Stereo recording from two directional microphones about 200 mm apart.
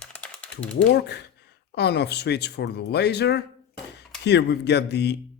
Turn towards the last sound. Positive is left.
turn(degrees=55)  # may be behind; listen again after turning